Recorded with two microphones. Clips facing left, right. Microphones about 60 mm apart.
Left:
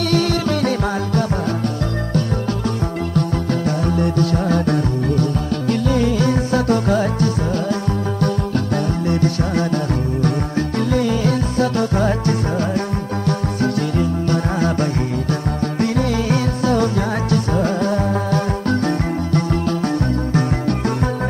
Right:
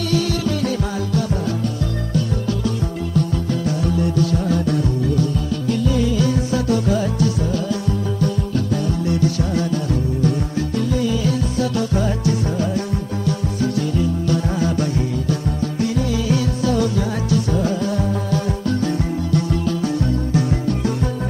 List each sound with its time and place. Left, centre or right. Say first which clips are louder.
0.1 s music: left 1 dB; left
3.2 s music: left 1 dB; left
9.1 s music: left 1 dB; left
10.9 s music: left 3 dB; left